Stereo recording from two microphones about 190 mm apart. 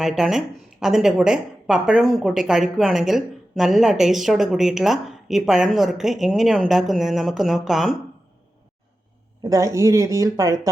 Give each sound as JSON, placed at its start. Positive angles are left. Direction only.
{"t": 0.0, "sound": "speech", "side_deg": 0}
{"t": 9.4, "sound": "speech", "side_deg": -15}